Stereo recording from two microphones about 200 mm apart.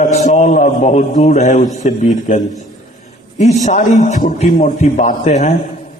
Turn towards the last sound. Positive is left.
turn(degrees=35)  # may be behind; listen again after turning